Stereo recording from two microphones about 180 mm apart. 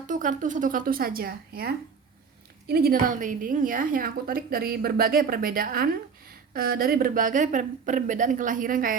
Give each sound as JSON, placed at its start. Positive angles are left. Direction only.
{"t": 0.1, "sound": "a woman's voice", "side_deg": -45}